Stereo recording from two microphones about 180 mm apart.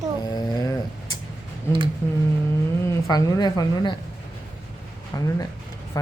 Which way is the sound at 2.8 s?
20° left (ahead or behind).